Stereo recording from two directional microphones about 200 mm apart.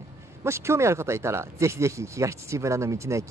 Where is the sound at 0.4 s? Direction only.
15° right (ahead or behind).